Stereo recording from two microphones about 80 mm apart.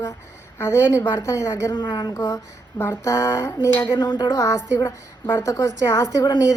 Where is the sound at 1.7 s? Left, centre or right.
Left.